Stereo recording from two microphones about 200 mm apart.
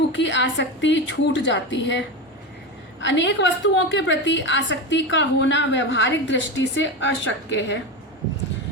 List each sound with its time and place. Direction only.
0.1 s a woman's voice: 65° left (ahead or behind)